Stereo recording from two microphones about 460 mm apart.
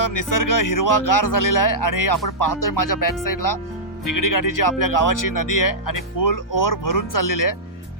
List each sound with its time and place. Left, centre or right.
0.0 s speech: left